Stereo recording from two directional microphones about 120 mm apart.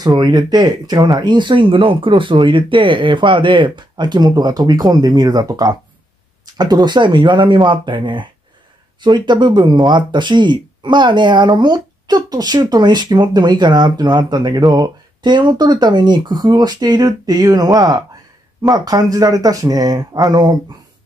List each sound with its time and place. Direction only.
0.0 s speech: 35° right (ahead or behind)